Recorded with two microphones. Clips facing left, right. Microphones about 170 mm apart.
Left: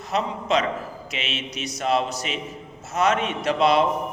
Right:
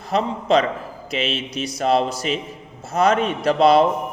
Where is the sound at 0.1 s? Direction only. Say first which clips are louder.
Right 5 dB; 30° right (ahead or behind).